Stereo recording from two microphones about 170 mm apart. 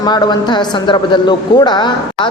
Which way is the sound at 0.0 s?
25° left (ahead or behind).